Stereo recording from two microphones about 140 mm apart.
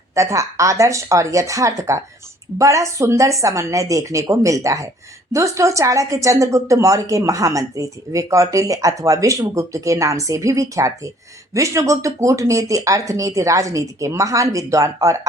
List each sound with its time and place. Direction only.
0.1 s a woman's voice: 20° right (ahead or behind)